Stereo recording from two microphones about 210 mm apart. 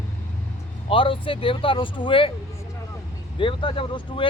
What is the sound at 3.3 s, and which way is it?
Speech, 25° left (ahead or behind).